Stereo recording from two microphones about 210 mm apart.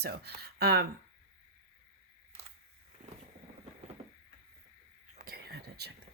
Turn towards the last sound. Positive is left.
turn(degrees=-50)  # may be behind; listen again after turning